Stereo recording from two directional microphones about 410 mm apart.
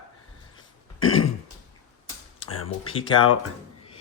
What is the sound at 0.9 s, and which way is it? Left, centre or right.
Throat clearing, left.